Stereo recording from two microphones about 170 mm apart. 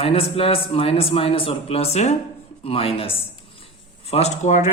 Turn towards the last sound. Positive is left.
turn(degrees=45)  # may be behind; listen again after turning